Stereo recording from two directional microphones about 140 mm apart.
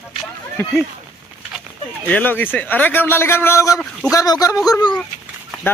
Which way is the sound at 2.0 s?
10° left (ahead or behind).